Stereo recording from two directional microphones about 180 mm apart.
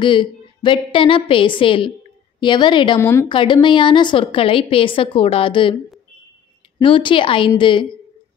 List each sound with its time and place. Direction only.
0.0 s a woman's voice: 25° left (ahead or behind)
3.0 s a woman's voice: 15° left (ahead or behind)
3.3 s a woman's voice: 25° left (ahead or behind)
6.8 s a woman's voice: 30° left (ahead or behind)